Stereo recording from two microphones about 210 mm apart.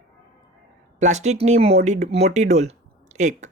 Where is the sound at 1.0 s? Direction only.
35° right (ahead or behind).